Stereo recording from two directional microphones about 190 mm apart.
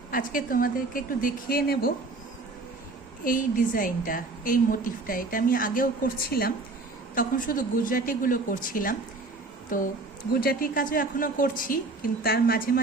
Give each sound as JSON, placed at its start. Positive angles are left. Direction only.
{"t": 0.1, "sound": "a woman's voice", "side_deg": 45}
{"t": 3.2, "sound": "a woman's voice", "side_deg": 45}